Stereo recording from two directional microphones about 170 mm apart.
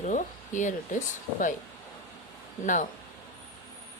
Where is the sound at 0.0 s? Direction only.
45° left (ahead or behind).